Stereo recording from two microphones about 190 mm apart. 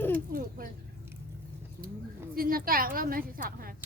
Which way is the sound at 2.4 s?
50° right (ahead or behind).